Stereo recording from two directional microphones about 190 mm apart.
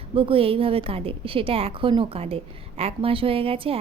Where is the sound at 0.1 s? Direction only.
30° right (ahead or behind).